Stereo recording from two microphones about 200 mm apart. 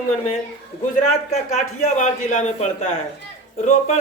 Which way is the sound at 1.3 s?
35° left (ahead or behind).